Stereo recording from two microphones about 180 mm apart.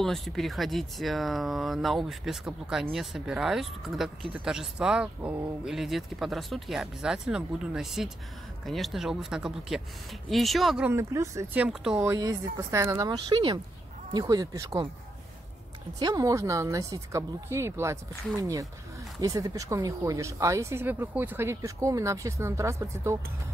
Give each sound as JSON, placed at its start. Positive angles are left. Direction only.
{"t": 0.0, "sound": "speech", "side_deg": 0}
{"t": 10.9, "sound": "speech", "side_deg": -15}
{"t": 12.1, "sound": "speech", "side_deg": -20}
{"t": 16.0, "sound": "speech", "side_deg": -20}